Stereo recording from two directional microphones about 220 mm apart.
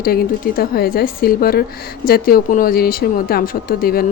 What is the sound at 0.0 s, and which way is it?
A woman's voice, 45° left (ahead or behind).